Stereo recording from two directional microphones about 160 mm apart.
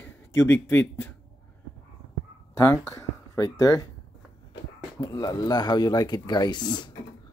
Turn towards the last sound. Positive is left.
turn(degrees=25)  # may be behind; listen again after turning